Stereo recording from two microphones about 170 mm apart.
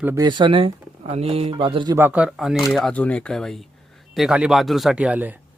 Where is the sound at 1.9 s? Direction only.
10° right (ahead or behind).